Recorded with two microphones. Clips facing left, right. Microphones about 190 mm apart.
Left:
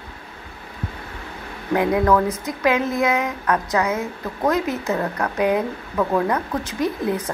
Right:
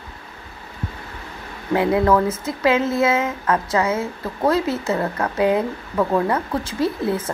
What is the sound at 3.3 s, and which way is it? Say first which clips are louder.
Speech: right 1 dB; 5° right (ahead or behind).